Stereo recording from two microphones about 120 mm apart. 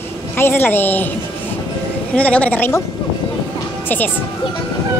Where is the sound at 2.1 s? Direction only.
10° left (ahead or behind).